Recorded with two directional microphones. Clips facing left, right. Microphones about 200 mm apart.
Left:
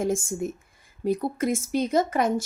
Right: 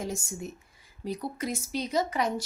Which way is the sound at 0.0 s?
50° left (ahead or behind).